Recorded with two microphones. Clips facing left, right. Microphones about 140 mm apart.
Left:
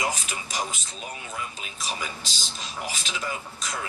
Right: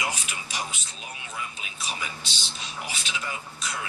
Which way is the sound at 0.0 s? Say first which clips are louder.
Left 3 dB; 45° left (ahead or behind).